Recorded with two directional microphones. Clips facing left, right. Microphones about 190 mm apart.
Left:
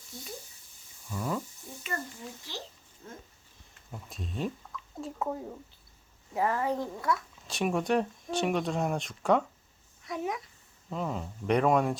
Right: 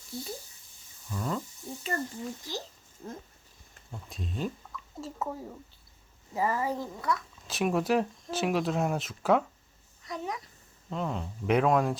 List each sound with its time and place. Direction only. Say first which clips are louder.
1.1 s speech: even; 5° left (ahead or behind)
2.5 s speech: right 4 dB; 40° right (ahead or behind)
3.9 s a woman's voice: even; centre (ahead or behind)